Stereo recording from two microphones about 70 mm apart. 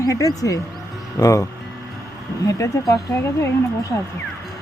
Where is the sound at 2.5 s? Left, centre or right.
Left.